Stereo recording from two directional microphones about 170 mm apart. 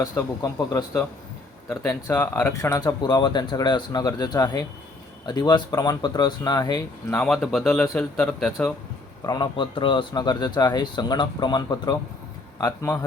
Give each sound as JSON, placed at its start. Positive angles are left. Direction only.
{"t": 0.0, "sound": "speech", "side_deg": 20}
{"t": 7.3, "sound": "speech", "side_deg": 0}
{"t": 9.2, "sound": "speech", "side_deg": 25}